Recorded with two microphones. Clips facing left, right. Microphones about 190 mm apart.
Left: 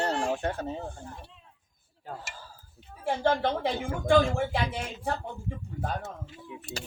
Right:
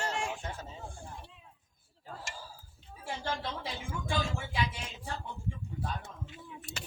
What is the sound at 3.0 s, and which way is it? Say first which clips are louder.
Speech: left 11 dB; 60° left (ahead or behind).